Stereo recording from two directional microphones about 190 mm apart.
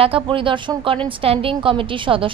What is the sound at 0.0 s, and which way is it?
A woman's voice, 30° right (ahead or behind).